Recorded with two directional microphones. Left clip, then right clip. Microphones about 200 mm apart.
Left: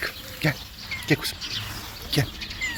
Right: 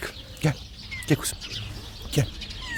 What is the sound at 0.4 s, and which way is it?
Speech, 25° right (ahead or behind).